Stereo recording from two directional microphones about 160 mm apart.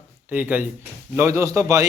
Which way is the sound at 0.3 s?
10° right (ahead or behind).